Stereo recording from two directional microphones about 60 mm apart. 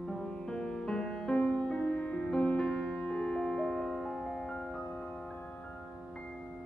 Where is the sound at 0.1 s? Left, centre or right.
Centre.